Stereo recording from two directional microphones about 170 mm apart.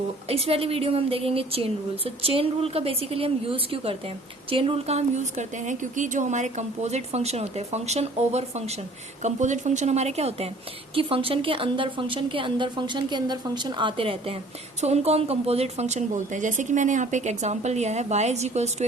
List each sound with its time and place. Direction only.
0.3 s a woman's voice: 35° right (ahead or behind)